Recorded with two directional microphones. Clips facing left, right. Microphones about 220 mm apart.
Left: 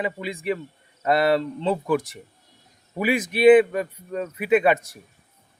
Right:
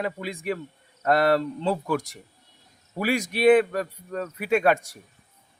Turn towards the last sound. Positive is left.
turn(degrees=0)  # may be behind; listen again after turning